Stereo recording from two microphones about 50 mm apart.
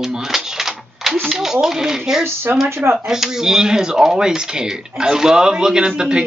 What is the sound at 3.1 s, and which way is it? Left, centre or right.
Speech, centre.